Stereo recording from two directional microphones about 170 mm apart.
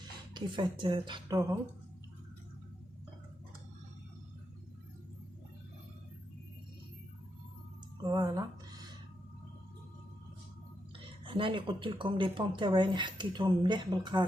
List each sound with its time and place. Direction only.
0.3 s speech: 25° right (ahead or behind)
8.0 s a sound: 20° right (ahead or behind)
11.3 s speech: 30° right (ahead or behind)